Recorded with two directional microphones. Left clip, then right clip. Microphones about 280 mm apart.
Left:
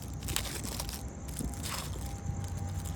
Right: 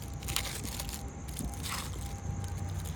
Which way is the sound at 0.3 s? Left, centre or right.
Left.